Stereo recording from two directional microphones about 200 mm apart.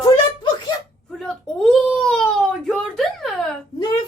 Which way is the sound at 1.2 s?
5° left (ahead or behind).